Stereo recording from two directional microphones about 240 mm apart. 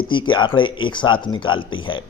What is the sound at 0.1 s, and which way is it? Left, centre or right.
A man's voice, centre.